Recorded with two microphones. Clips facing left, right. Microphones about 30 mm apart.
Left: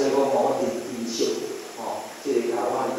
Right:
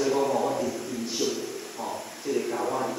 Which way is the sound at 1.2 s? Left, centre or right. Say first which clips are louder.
Left 4 dB; left.